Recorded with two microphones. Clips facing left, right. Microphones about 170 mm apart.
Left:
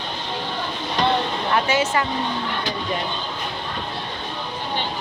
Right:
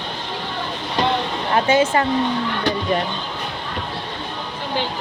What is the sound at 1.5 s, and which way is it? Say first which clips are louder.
Speech: right 5 dB; 30° right (ahead or behind).